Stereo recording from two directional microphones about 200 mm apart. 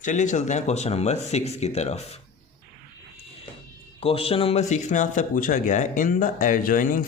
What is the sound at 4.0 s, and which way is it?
Speech, 30° left (ahead or behind).